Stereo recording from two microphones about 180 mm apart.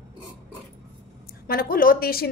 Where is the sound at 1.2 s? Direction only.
55° left (ahead or behind).